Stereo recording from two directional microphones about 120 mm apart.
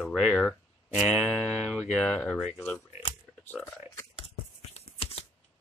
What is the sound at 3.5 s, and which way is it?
Speech, 5° left (ahead or behind).